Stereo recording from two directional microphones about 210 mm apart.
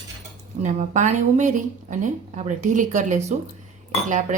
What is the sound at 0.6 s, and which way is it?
Speech, 35° right (ahead or behind).